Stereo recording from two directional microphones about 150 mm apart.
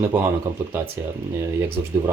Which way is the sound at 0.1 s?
10° right (ahead or behind).